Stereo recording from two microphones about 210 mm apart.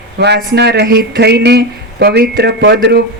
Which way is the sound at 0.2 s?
55° right (ahead or behind).